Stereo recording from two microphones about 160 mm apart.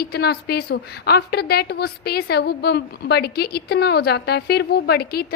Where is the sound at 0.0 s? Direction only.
80° left.